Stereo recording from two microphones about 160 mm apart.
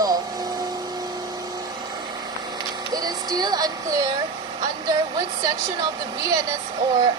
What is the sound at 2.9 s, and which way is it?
Speech, 25° right (ahead or behind).